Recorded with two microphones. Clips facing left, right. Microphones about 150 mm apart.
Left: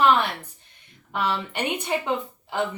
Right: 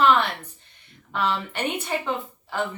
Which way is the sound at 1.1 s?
15° left (ahead or behind).